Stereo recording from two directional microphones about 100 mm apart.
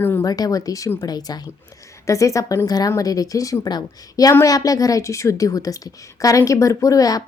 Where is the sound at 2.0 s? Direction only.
30° left (ahead or behind).